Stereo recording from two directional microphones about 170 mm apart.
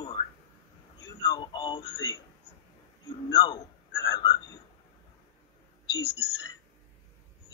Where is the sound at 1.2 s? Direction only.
25° left (ahead or behind).